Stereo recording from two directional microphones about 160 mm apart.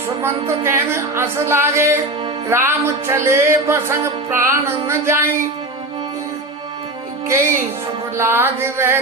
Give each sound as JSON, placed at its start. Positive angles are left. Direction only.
{"t": 0.2, "sound": "music", "side_deg": -15}
{"t": 7.3, "sound": "music", "side_deg": -15}